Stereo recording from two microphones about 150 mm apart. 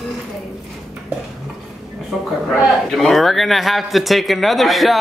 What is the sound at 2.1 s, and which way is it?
A man's voice, centre (ahead or behind).